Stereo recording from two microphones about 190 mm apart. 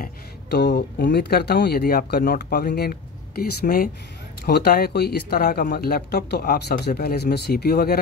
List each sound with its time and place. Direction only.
0.0 s speech: 60° left (ahead or behind)